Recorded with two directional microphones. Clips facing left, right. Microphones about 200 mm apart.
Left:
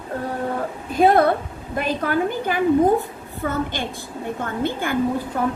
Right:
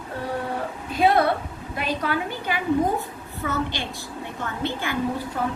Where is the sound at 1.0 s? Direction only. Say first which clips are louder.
Left 4 dB; 45° left (ahead or behind).